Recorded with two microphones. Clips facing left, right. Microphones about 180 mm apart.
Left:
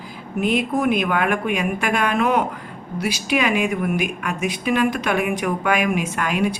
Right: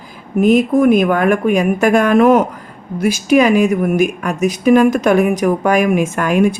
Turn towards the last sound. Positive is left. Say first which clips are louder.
# right 8 dB
turn(degrees=-45)  # may be behind; listen again after turning